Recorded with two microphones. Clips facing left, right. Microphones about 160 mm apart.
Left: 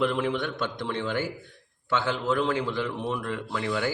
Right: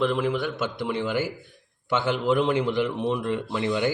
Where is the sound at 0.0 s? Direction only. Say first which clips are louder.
Right 2 dB; centre (ahead or behind).